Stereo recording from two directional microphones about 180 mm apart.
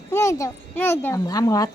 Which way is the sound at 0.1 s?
15° left (ahead or behind).